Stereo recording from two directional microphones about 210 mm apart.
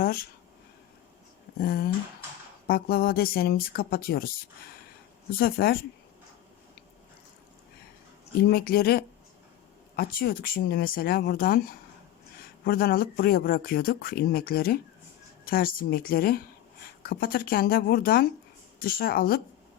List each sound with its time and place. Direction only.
0.0 s a sound: 45° left (ahead or behind)
1.5 s speech: 45° left (ahead or behind)
5.4 s speech: 45° left (ahead or behind)
8.4 s speech: 45° left (ahead or behind)